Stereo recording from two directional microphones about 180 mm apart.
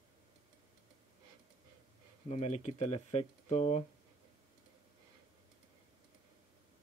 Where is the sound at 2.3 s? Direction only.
40° left (ahead or behind).